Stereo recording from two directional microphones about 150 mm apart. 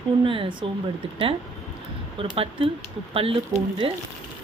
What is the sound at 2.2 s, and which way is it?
Speech, 35° right (ahead or behind).